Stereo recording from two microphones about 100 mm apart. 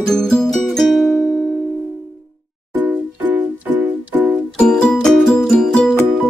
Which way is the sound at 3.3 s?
15° right (ahead or behind).